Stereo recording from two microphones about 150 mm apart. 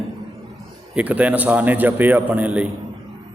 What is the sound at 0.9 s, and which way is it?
A man's voice, 10° right (ahead or behind).